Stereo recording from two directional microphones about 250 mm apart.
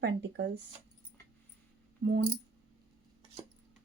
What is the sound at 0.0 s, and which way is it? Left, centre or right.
Speech, right.